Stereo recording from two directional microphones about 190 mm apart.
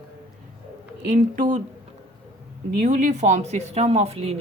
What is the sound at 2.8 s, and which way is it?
A woman's voice, 40° right (ahead or behind).